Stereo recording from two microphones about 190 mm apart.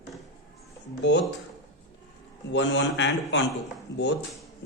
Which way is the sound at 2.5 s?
70° left (ahead or behind).